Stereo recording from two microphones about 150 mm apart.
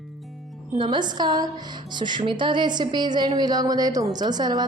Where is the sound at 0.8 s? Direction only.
30° right (ahead or behind).